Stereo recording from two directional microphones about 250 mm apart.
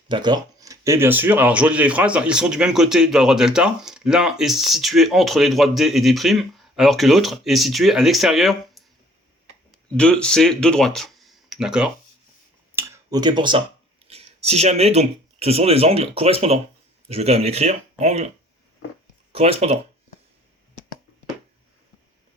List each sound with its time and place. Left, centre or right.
0.1 s speech: centre
10.0 s speech: centre
12.7 s a sound: centre
14.0 s speech: right
19.3 s speech: right